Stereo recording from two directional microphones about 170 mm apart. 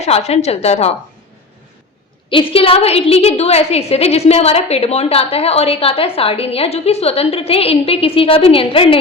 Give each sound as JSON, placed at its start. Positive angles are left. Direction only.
{"t": 0.0, "sound": "a woman's voice", "side_deg": 40}
{"t": 2.3, "sound": "a woman's voice", "side_deg": 30}